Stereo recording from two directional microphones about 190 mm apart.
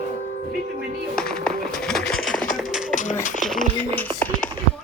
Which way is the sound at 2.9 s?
45° left (ahead or behind).